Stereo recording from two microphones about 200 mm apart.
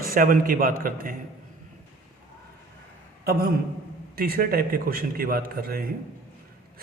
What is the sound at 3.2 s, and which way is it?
A man's voice, 50° right (ahead or behind).